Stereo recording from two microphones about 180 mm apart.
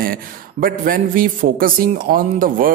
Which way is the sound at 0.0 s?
55° right (ahead or behind).